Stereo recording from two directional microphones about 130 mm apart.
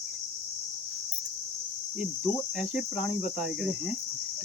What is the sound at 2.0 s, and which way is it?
Cricket, 5° right (ahead or behind).